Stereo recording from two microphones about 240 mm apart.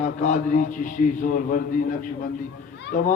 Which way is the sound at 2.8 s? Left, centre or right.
Left.